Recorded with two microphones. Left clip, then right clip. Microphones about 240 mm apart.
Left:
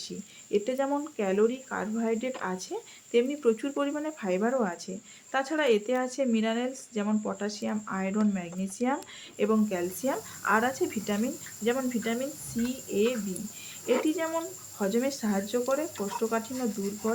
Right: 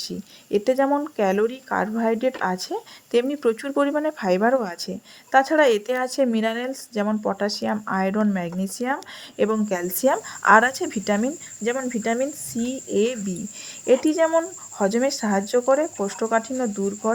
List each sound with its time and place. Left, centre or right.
0.5 s speech: right